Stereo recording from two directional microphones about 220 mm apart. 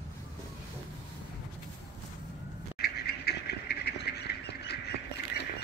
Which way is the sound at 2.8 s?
45° left (ahead or behind).